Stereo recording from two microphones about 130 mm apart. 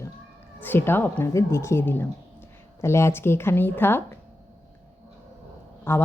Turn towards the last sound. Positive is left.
turn(degrees=15)  # may be behind; listen again after turning